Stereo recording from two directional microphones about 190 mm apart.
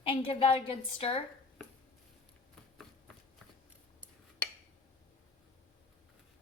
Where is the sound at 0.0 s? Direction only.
30° left (ahead or behind).